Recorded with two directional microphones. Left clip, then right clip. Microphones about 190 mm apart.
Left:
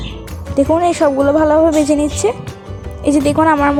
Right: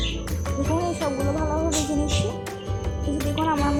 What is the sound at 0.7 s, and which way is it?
Speech, 55° left (ahead or behind).